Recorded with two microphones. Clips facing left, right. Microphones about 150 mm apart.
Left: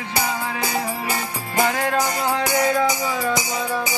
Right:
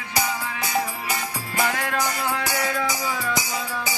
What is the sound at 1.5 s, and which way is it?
Music, 30° left (ahead or behind).